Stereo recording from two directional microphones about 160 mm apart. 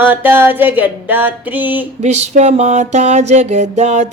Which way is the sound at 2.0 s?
45° right (ahead or behind).